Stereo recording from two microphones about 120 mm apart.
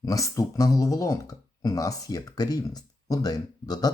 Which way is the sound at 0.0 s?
30° left (ahead or behind).